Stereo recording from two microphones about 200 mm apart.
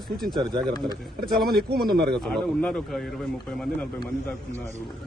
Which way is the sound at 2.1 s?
Centre (ahead or behind).